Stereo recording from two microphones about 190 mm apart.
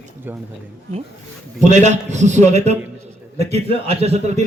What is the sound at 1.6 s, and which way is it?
A man's voice, 40° right (ahead or behind).